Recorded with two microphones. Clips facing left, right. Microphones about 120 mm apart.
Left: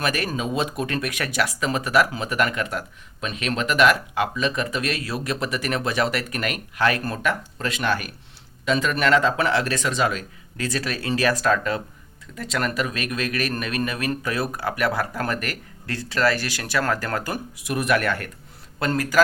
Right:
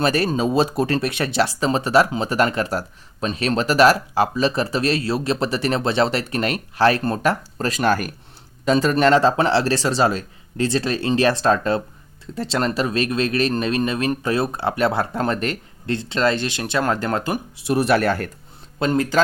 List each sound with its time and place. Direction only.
0.0 s speech: 30° right (ahead or behind)